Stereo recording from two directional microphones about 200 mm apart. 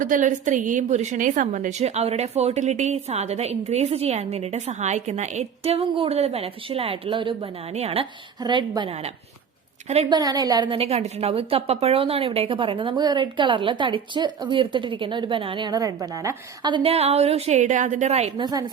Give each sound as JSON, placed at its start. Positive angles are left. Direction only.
{"t": 0.0, "sound": "a woman's voice", "side_deg": -40}
{"t": 9.9, "sound": "a woman's voice", "side_deg": -30}
{"t": 10.2, "sound": "a woman's voice", "side_deg": -20}
{"t": 18.4, "sound": "a woman's voice", "side_deg": -20}